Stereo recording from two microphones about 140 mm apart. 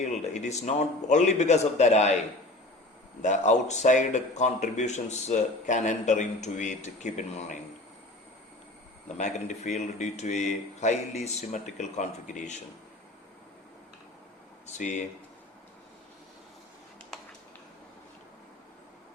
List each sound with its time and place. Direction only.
0.0 s a man's voice: 55° left (ahead or behind)
9.0 s a man's voice: 55° left (ahead or behind)
14.8 s a man's voice: 60° left (ahead or behind)